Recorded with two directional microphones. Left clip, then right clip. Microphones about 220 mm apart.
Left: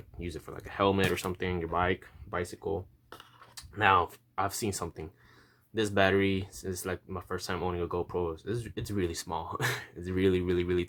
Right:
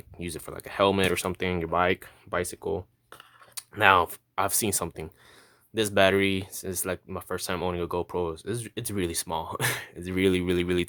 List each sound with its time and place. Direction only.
0.2 s speech: 35° right (ahead or behind)